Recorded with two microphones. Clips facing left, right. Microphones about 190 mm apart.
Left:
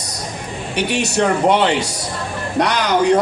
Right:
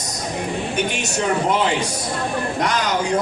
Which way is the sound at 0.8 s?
70° left (ahead or behind).